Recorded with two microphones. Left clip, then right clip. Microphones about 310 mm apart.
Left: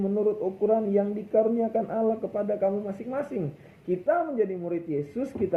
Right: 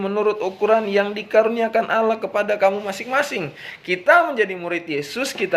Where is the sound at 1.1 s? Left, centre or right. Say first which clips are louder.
Right 7 dB; right.